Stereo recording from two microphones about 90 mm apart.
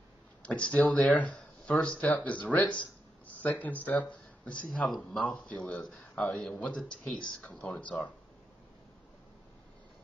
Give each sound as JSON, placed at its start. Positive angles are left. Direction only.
{"t": 0.4, "sound": "speech", "side_deg": 15}